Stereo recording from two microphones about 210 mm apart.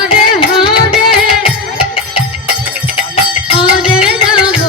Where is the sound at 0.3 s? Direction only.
25° left (ahead or behind).